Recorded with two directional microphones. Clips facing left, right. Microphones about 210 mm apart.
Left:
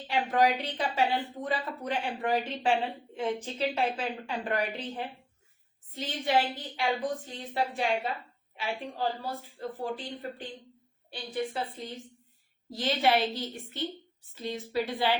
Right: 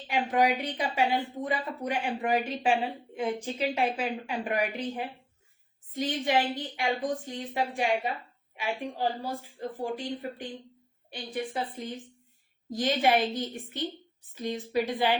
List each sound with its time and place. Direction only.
0.1 s speech: 10° right (ahead or behind)